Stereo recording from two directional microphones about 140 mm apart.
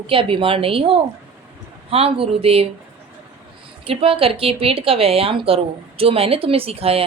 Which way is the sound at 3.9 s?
40° right (ahead or behind).